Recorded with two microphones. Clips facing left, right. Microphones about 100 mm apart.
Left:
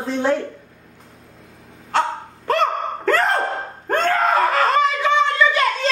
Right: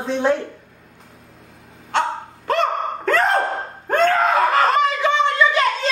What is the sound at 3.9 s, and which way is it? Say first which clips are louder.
Screaming: right 2 dB; centre (ahead or behind).